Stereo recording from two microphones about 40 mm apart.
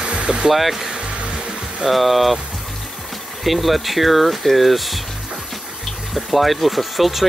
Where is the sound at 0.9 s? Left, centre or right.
Right.